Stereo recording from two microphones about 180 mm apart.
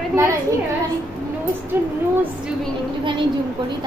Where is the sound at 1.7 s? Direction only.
10° right (ahead or behind).